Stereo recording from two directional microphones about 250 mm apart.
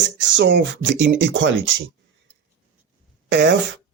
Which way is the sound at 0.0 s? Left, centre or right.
Right.